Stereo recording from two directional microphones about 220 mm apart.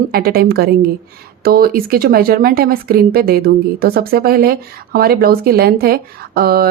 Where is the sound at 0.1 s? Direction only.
45° right (ahead or behind).